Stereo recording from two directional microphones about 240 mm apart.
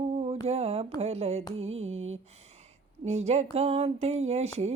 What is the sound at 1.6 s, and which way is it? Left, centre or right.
Music, right.